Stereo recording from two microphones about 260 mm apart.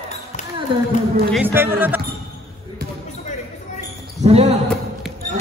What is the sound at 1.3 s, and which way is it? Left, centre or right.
Speech, centre.